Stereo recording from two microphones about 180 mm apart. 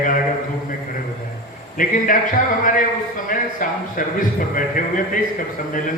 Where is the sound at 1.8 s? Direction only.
50° left (ahead or behind).